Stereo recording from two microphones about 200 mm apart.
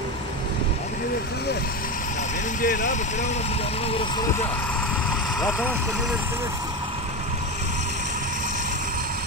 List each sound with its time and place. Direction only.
2.6 s speech: 40° left (ahead or behind)